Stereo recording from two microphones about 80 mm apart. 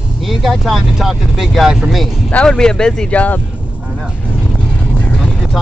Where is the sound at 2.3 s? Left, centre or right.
Centre.